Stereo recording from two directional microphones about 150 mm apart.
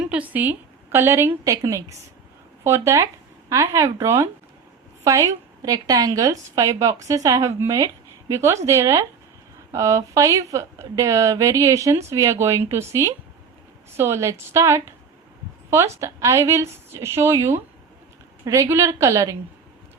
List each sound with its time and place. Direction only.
0.1 s a woman's voice: 10° right (ahead or behind)
16.0 s speech: 20° right (ahead or behind)